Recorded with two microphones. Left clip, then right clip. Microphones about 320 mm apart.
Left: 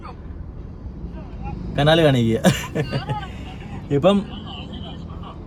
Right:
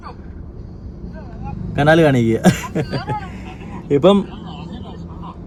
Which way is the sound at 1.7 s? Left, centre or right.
Centre.